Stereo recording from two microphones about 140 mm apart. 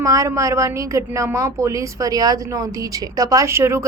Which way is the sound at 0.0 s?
25° right (ahead or behind).